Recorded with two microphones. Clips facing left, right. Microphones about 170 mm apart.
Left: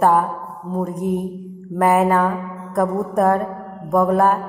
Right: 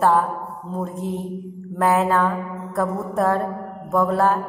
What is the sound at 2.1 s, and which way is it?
Mantra, 20° left (ahead or behind).